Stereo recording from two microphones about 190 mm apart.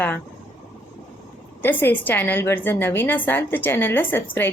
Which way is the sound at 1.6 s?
10° left (ahead or behind).